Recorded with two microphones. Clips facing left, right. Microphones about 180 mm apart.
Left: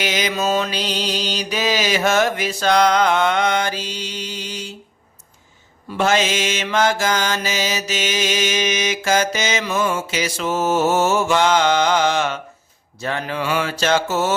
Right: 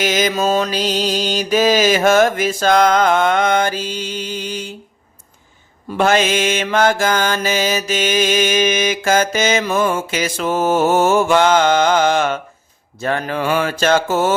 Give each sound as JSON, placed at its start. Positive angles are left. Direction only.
{"t": 0.0, "sound": "mantra", "side_deg": -45}
{"t": 6.0, "sound": "mantra", "side_deg": -55}